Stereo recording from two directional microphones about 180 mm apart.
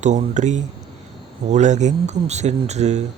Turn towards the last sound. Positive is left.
turn(degrees=-40)  # may be behind; listen again after turning